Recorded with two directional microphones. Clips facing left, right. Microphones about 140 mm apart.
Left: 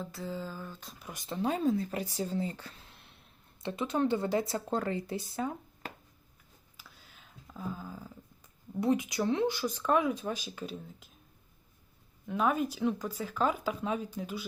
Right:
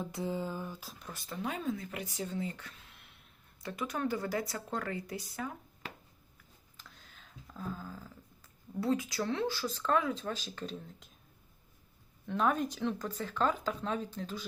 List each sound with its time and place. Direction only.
0.0 s a sound: 20° right (ahead or behind)
1.1 s speech: 20° left (ahead or behind)
1.4 s speech: 35° left (ahead or behind)
5.8 s writing: 45° left (ahead or behind)
7.5 s speech: 10° left (ahead or behind)
12.2 s speech: 5° left (ahead or behind)